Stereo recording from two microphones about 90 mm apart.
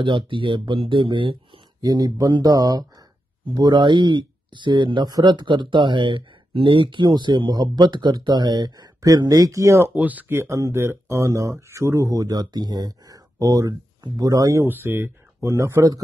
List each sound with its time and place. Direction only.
0.0 s speech: 65° right (ahead or behind)
1.8 s speech: 45° right (ahead or behind)
3.5 s speech: 55° right (ahead or behind); by 9.8 s 35° right (ahead or behind)
9.9 s speech: 20° right (ahead or behind); by 14.6 s 40° right (ahead or behind)
14.6 s speech: 25° right (ahead or behind)